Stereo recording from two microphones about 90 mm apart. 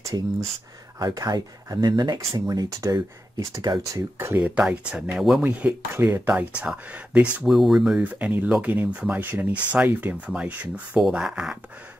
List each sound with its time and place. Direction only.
0.9 s speech: 45° right (ahead or behind); by 4.4 s 30° right (ahead or behind)
4.4 s speech: 10° right (ahead or behind)
7.4 s speech: centre (ahead or behind)
8.1 s speech: 20° right (ahead or behind)